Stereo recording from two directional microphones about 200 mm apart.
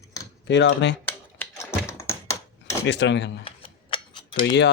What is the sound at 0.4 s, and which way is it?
Speech, 60° left (ahead or behind).